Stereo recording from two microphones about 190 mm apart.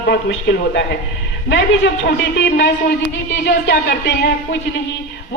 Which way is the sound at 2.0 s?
65° left (ahead or behind).